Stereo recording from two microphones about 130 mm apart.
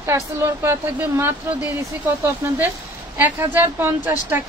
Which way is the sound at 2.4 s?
20° right (ahead or behind).